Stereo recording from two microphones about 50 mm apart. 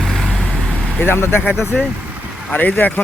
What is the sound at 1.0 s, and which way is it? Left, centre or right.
Speech, left.